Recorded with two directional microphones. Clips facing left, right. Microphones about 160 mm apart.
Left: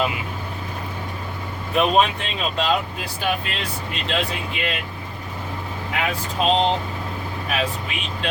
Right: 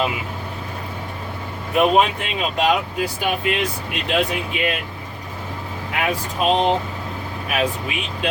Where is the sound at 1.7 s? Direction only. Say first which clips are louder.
Right 2 dB; 10° right (ahead or behind).